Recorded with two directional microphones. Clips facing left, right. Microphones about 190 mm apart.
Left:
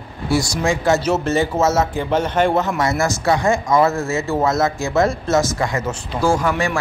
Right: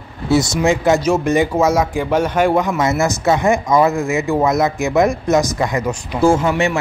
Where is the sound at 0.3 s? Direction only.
20° right (ahead or behind).